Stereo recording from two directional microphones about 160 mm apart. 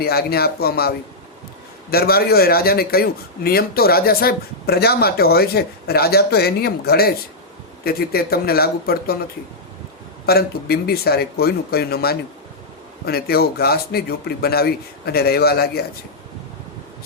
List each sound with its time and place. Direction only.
0.0 s a man's voice: 75° left (ahead or behind)
10.2 s a man's voice: 75° left (ahead or behind)